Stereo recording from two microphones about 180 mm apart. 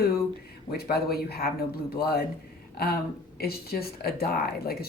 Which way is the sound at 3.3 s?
60° left (ahead or behind).